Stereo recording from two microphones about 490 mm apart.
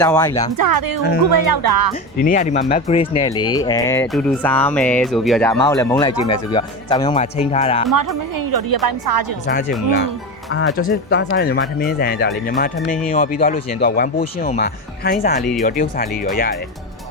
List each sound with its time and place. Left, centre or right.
0.0 s speech: centre
0.5 s a woman's voice: right
2.2 s speech: centre
7.9 s a woman's voice: right
9.5 s speech: centre